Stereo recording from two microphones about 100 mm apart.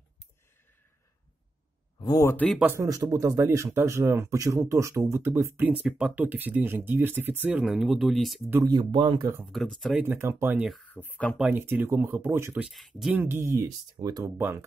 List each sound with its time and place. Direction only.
2.0 s a sound: 45° left (ahead or behind)
2.2 s speech: 15° left (ahead or behind)
2.6 s speech: 30° right (ahead or behind)
7.6 s speech: 5° right (ahead or behind)
8.6 s speech: 45° right (ahead or behind)
9.5 s speech: centre (ahead or behind)
10.0 s speech: 25° right (ahead or behind)
10.8 s speech: 15° left (ahead or behind)
11.5 s speech: 20° right (ahead or behind)
12.6 s speech: centre (ahead or behind)
13.1 s speech: 20° right (ahead or behind)
13.9 s speech: 40° right (ahead or behind)
14.3 s speech: 25° right (ahead or behind)